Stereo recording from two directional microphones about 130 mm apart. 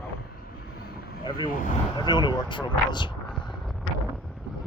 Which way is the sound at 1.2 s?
35° left (ahead or behind).